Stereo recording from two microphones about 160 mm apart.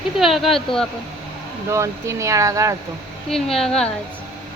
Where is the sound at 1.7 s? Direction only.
15° right (ahead or behind).